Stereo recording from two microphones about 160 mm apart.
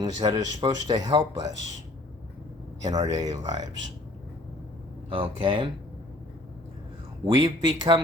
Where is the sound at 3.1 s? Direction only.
25° right (ahead or behind).